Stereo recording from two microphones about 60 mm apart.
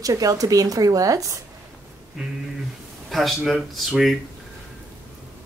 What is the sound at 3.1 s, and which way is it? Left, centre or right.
Speech, centre.